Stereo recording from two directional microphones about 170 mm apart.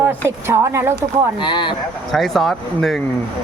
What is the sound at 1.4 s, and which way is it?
Speech, 30° left (ahead or behind).